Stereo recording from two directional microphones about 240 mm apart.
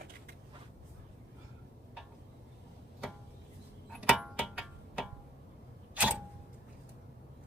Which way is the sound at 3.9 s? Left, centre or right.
Centre.